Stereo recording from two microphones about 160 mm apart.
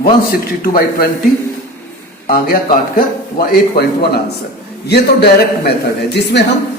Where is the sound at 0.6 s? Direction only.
65° left (ahead or behind).